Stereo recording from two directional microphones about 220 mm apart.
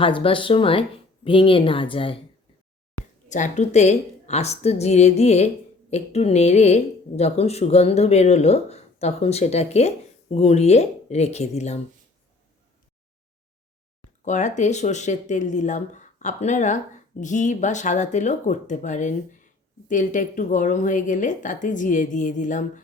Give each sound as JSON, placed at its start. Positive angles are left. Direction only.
{"t": 0.0, "sound": "speech", "side_deg": 25}
{"t": 3.2, "sound": "speech", "side_deg": 35}
{"t": 14.3, "sound": "speech", "side_deg": 35}